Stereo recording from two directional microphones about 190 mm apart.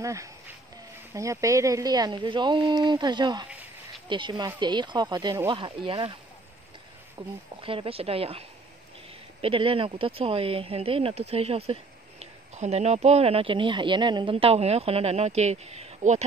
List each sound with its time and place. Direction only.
0.0 s speech: 15° right (ahead or behind)
3.4 s a sound: 5° right (ahead or behind)
4.1 s speech: 25° right (ahead or behind)
7.2 s speech: 30° right (ahead or behind)